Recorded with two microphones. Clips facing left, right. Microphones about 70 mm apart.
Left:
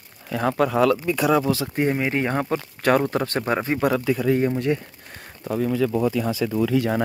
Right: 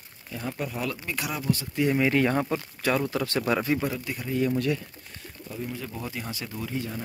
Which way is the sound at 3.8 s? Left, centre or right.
Left.